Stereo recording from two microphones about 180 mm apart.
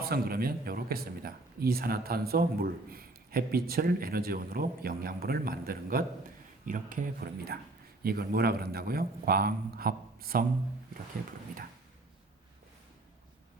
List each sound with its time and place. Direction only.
0.0 s speech: 55° right (ahead or behind)